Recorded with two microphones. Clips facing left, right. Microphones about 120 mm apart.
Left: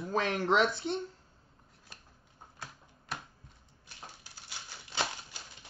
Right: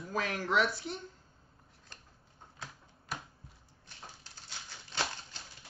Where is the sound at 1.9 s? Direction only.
10° left (ahead or behind).